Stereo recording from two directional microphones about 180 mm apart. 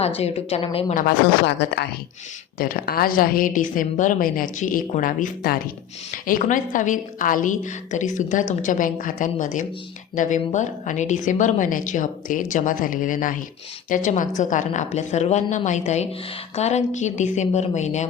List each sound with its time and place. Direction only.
0.0 s a woman's voice: 35° left (ahead or behind)
1.5 s speech: 65° left (ahead or behind)
2.6 s a woman's voice: 55° left (ahead or behind); by 18.1 s 40° left (ahead or behind)